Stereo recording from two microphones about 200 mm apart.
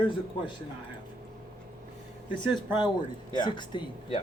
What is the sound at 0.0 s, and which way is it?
Speech, 25° left (ahead or behind).